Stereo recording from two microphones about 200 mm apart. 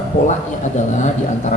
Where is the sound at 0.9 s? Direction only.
35° left (ahead or behind).